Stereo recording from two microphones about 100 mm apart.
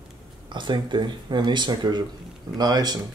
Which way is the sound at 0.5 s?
50° right (ahead or behind).